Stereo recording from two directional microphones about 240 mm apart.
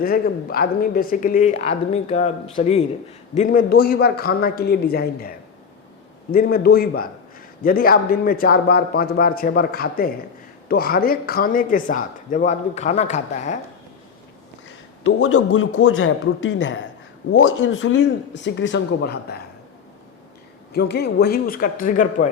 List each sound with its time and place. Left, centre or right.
0.0 s speech: left
6.3 s speech: left
15.0 s speech: left
20.7 s speech: left